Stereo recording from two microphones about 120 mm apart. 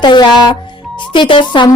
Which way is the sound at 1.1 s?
45° left (ahead or behind).